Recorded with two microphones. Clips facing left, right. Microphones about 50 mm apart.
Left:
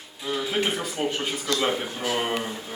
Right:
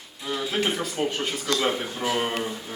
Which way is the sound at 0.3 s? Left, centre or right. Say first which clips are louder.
Even; centre.